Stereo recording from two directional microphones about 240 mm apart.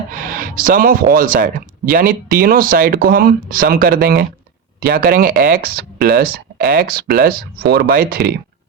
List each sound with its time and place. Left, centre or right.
0.1 s speech: right